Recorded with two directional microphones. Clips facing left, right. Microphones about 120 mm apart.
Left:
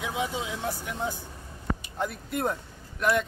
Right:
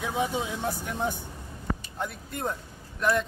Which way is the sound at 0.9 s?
20° right (ahead or behind).